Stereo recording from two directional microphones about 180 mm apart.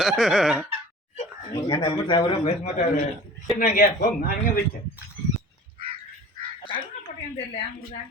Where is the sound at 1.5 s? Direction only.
25° left (ahead or behind).